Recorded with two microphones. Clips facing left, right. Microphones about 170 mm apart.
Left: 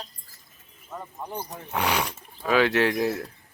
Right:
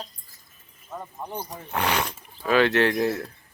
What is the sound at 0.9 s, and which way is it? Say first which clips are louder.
Speech: right 1 dB; 5° right (ahead or behind).